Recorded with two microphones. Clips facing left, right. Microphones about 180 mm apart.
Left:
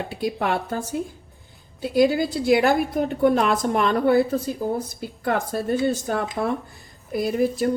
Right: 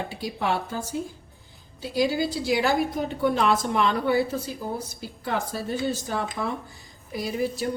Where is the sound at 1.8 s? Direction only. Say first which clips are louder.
Left 5 dB; 55° left (ahead or behind).